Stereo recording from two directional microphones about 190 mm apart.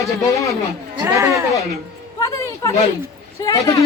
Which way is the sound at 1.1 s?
15° right (ahead or behind).